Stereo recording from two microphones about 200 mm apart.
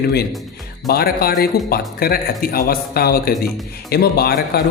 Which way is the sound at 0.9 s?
50° left (ahead or behind).